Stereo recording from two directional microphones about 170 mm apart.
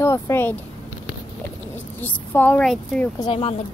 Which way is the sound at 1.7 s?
10° left (ahead or behind).